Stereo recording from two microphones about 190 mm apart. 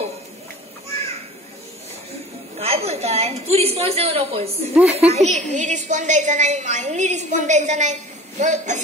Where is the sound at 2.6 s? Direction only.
35° right (ahead or behind).